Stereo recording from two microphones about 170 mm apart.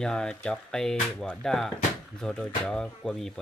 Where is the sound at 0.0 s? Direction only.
5° left (ahead or behind).